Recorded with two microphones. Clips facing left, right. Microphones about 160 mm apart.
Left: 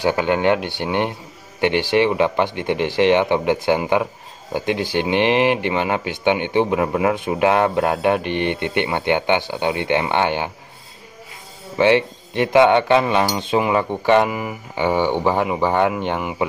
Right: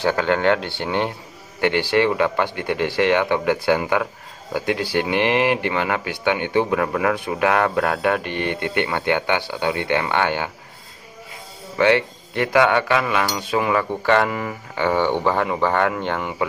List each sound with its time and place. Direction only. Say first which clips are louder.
0.0 s speech: left 1 dB; 15° left (ahead or behind)
11.8 s speech: left 2 dB; 20° left (ahead or behind)